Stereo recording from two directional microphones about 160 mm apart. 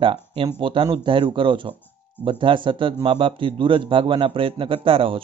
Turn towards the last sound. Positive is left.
turn(degrees=-35)  # may be behind; listen again after turning